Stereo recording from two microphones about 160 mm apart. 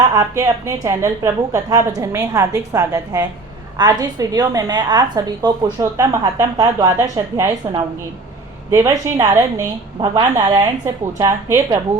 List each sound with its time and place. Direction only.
0.1 s a woman's voice: 20° right (ahead or behind)